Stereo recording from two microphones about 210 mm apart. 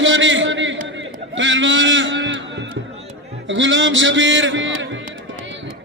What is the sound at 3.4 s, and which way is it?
A man's voice, 60° right (ahead or behind).